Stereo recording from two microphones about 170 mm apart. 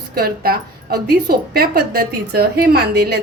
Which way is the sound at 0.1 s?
60° right (ahead or behind).